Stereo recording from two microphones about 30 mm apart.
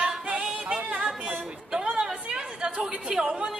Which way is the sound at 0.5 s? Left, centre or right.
Right.